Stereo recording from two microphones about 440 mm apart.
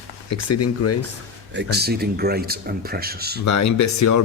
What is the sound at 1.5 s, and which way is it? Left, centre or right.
Speech, right.